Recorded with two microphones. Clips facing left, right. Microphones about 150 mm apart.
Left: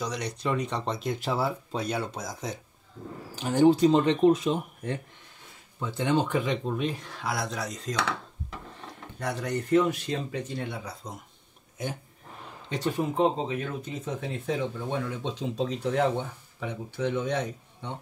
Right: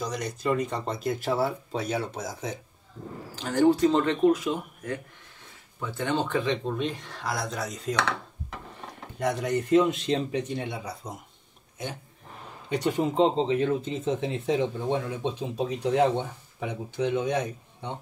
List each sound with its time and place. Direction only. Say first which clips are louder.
0.4 s speech: right 3 dB; 5° right (ahead or behind)
3.3 s speech: left 1 dB; 15° left (ahead or behind); by 7.9 s 5° right (ahead or behind)
9.2 s speech: right 4 dB; 15° right (ahead or behind)
12.6 s speech: right 3 dB; 15° right (ahead or behind)
15.3 s speech: even; 10° right (ahead or behind)
15.9 s speech: right 4 dB; 20° right (ahead or behind)